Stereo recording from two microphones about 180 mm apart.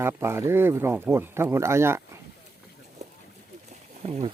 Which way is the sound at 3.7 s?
35° right (ahead or behind).